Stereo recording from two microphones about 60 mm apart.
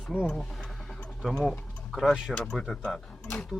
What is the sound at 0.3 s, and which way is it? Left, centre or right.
Speech, centre.